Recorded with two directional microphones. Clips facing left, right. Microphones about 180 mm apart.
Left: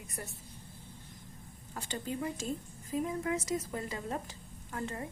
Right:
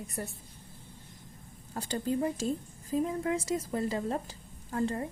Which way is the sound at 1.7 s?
35° right (ahead or behind).